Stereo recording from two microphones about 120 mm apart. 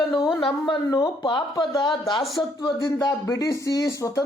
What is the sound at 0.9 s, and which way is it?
Speech, 40° left (ahead or behind).